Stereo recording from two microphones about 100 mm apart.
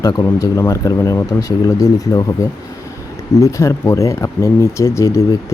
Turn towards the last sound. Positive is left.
turn(degrees=30)  # may be behind; listen again after turning